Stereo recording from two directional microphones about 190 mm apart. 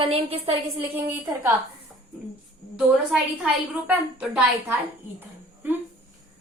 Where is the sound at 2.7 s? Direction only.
5° right (ahead or behind).